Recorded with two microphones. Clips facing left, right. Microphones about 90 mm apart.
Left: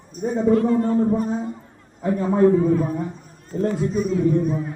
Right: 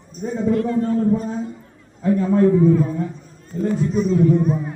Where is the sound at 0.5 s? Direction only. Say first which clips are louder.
Left 2 dB; 40° left (ahead or behind).